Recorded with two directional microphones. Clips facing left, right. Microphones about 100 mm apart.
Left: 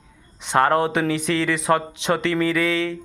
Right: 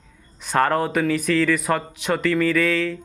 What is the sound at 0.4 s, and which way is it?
Speech, 20° left (ahead or behind).